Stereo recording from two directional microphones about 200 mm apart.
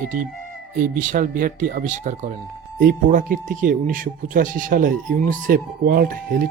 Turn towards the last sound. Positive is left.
turn(degrees=-45)  # may be behind; listen again after turning